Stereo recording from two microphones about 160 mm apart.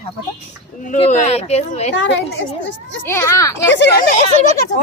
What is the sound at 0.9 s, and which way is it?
Speech, 45° left (ahead or behind).